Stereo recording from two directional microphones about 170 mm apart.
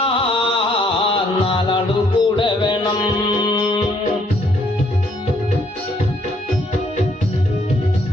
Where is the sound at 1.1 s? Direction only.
30° left (ahead or behind).